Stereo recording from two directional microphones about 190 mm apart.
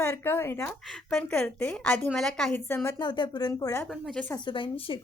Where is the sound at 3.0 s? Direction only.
25° left (ahead or behind).